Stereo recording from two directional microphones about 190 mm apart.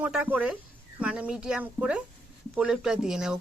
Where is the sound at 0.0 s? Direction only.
5° right (ahead or behind).